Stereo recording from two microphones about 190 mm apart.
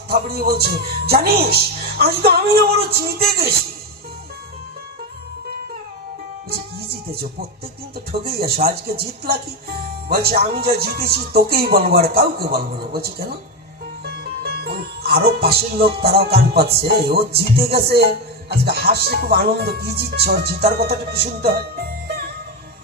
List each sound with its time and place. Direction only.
0.1 s a woman's voice: 55° right (ahead or behind)
6.9 s a woman's voice: 55° right (ahead or behind)
14.0 s music: 55° right (ahead or behind)
16.0 s a woman's voice: 55° right (ahead or behind)